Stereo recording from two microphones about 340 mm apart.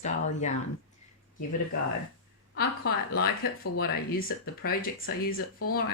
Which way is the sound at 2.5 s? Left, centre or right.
Left.